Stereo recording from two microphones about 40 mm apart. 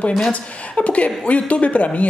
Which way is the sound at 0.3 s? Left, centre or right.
Left.